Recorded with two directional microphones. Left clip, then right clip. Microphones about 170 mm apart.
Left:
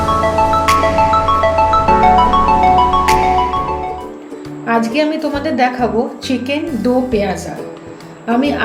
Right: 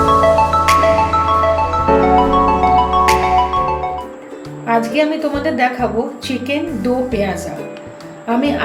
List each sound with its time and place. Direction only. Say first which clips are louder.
0.2 s music: right 1 dB; centre (ahead or behind)
4.6 s a woman's voice: even; 20° left (ahead or behind)